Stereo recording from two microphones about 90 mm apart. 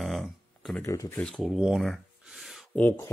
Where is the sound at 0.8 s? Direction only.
30° left (ahead or behind).